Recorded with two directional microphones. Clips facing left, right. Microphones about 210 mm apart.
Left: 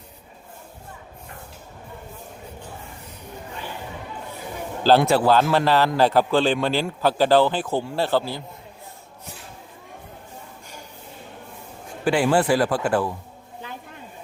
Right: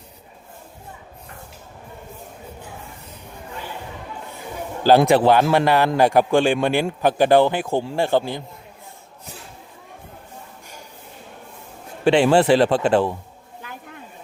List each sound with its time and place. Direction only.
4.8 s speech: 15° right (ahead or behind)
12.0 s speech: 25° right (ahead or behind)